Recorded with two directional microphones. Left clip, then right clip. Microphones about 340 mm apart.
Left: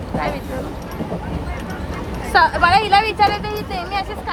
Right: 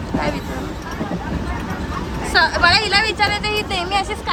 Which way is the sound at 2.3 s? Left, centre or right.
Centre.